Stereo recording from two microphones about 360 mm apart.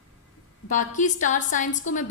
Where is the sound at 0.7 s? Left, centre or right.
Left.